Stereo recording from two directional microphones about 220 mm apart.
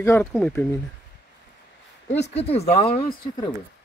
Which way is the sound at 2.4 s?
30° left (ahead or behind).